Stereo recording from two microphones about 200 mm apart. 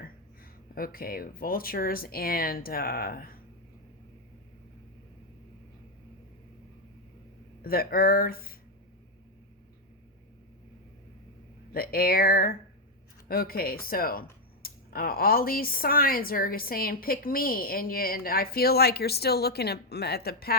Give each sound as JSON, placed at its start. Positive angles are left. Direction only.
{"t": 0.8, "sound": "speech", "side_deg": 45}
{"t": 7.6, "sound": "speech", "side_deg": 50}
{"t": 11.7, "sound": "speech", "side_deg": 50}